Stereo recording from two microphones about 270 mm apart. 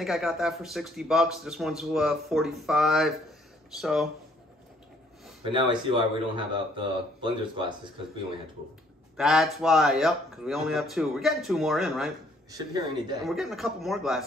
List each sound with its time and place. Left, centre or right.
0.0 s speech: centre
5.4 s speech: centre
9.1 s speech: centre
12.4 s speech: centre
13.2 s speech: centre